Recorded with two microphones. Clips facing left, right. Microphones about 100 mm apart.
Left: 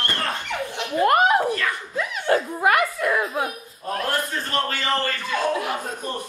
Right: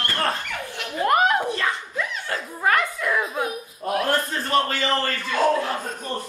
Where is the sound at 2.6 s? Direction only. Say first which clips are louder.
Left 2 dB; 10° left (ahead or behind).